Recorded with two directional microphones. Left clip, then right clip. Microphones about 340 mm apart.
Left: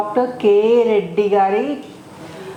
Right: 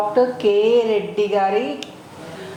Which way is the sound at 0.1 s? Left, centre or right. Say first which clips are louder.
Left 4 dB; left.